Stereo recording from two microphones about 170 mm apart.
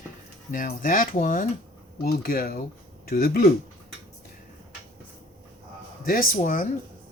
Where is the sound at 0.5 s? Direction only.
55° left (ahead or behind).